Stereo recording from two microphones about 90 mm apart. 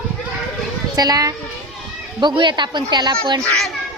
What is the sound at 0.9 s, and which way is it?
Speech, 45° right (ahead or behind).